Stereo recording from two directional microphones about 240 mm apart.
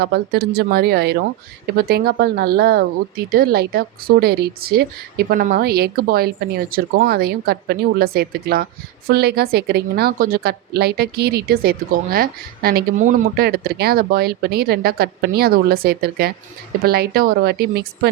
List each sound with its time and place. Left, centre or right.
0.0 s a woman's voice: right